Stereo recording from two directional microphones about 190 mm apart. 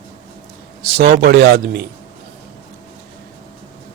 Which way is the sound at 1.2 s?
55° right (ahead or behind).